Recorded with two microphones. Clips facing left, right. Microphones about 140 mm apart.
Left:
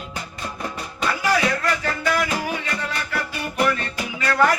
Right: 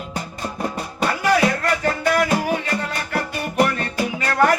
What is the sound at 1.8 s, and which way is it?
Music, 45° right (ahead or behind).